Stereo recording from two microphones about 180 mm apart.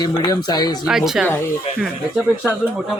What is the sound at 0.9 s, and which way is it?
Speech, centre (ahead or behind).